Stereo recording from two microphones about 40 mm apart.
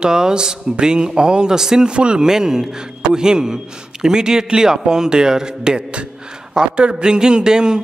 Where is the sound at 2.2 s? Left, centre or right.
Centre.